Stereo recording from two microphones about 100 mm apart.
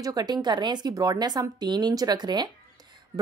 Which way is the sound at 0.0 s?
40° right (ahead or behind).